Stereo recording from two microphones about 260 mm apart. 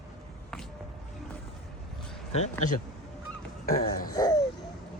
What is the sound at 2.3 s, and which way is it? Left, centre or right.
Speech, left.